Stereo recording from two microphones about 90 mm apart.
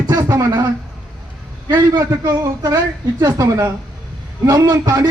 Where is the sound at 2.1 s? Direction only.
35° right (ahead or behind).